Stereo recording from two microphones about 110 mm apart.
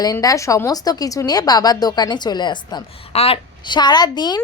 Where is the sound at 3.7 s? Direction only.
40° left (ahead or behind).